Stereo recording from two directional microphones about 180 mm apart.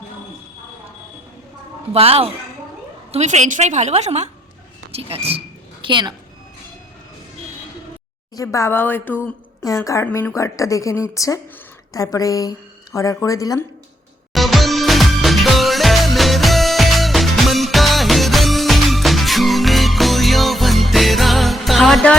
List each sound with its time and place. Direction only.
1.9 s a woman's voice: 35° right (ahead or behind)
8.4 s a woman's voice: 15° left (ahead or behind)
14.3 s music: centre (ahead or behind)